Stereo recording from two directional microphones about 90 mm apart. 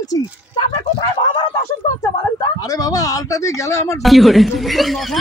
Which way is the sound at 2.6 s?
45° left (ahead or behind).